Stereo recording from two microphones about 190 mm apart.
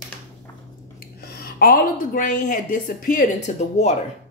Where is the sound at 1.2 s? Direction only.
55° left (ahead or behind).